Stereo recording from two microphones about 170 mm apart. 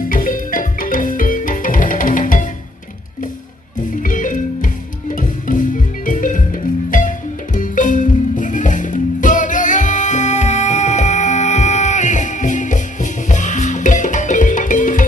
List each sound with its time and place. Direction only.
0.1 s music: 55° left (ahead or behind)
4.0 s music: 50° left (ahead or behind)